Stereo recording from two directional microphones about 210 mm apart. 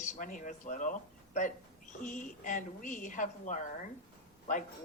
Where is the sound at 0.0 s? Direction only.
35° left (ahead or behind).